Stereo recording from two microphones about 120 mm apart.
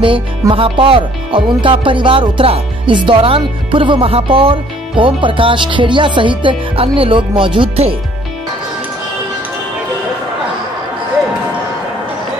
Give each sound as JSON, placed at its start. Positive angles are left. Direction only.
{"t": 0.0, "sound": "music", "side_deg": -45}